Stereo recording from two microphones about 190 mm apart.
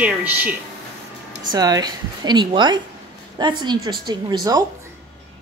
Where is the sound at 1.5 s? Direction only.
20° right (ahead or behind).